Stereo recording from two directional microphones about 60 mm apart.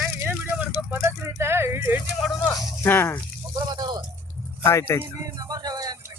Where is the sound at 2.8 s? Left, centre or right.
Left.